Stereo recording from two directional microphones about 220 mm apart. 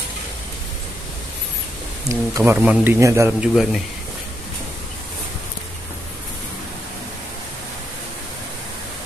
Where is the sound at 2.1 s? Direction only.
15° right (ahead or behind).